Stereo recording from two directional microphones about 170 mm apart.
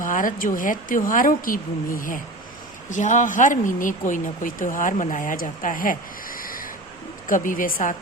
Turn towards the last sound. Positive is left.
turn(degrees=55)  # may be behind; listen again after turning